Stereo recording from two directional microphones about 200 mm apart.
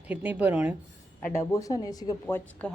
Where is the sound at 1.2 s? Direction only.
15° left (ahead or behind).